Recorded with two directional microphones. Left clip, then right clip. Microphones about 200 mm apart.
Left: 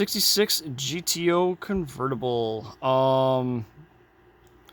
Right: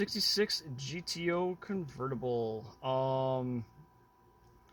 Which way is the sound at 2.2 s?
60° left (ahead or behind).